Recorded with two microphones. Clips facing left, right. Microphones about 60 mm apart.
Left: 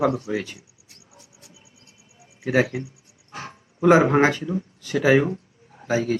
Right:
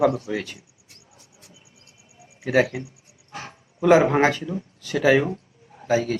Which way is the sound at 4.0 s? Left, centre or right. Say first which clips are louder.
Left 1 dB; centre.